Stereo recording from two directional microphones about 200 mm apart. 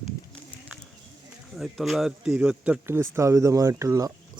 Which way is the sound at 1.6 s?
Centre (ahead or behind).